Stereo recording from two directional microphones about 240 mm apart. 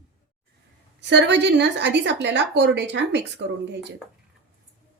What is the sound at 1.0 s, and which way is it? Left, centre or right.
A woman's voice, right.